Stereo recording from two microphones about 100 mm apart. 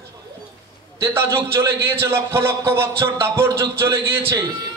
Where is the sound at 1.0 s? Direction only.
25° right (ahead or behind).